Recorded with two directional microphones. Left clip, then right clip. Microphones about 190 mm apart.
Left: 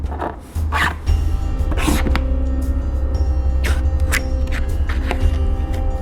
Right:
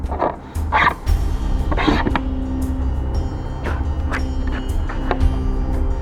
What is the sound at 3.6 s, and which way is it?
Music, 30° left (ahead or behind).